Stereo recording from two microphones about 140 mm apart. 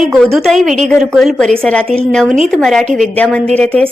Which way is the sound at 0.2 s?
Centre (ahead or behind).